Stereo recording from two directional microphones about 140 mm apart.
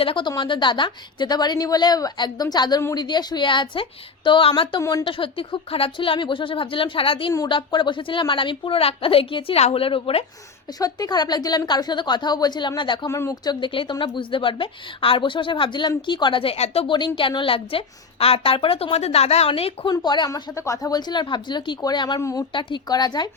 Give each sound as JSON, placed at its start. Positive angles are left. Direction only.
{"t": 0.0, "sound": "a woman's voice", "side_deg": 35}
{"t": 4.8, "sound": "a woman's voice", "side_deg": 25}
{"t": 10.8, "sound": "a woman's voice", "side_deg": 25}
{"t": 13.1, "sound": "a woman's voice", "side_deg": 20}
{"t": 19.9, "sound": "a woman's voice", "side_deg": 30}